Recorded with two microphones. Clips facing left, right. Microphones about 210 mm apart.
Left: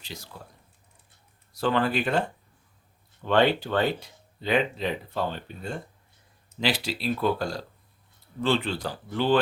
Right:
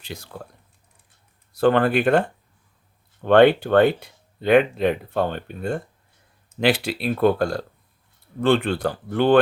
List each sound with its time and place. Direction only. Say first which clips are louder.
0.0 s speech: right 6 dB; 55° right (ahead or behind)
1.5 s speech: right 7 dB; 55° right (ahead or behind)
3.2 s speech: right 8 dB; 55° right (ahead or behind)